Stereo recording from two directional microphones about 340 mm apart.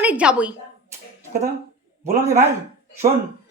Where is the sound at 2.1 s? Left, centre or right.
Centre.